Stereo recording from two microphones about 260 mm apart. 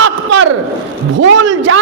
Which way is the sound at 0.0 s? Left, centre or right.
Right.